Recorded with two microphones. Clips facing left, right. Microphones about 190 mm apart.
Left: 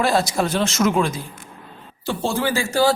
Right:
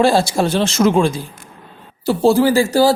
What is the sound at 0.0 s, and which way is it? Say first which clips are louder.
Speech: right 5 dB; 30° right (ahead or behind).